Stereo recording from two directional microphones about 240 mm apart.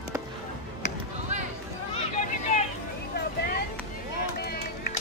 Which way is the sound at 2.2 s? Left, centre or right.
Left.